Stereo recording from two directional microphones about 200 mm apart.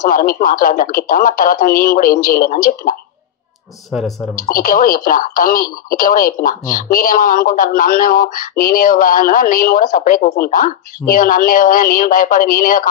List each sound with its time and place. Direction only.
0.0 s speech: 45° left (ahead or behind)
3.9 s speech: 5° right (ahead or behind)
4.4 s speech: 45° left (ahead or behind)